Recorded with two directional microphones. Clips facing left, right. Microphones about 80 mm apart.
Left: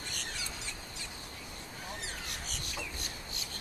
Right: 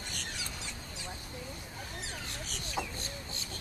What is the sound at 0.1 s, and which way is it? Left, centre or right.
Bird, centre.